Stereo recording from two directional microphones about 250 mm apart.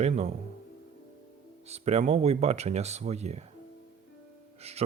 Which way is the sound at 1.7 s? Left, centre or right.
Right.